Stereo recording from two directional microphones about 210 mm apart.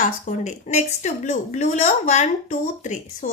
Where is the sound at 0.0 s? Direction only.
35° left (ahead or behind).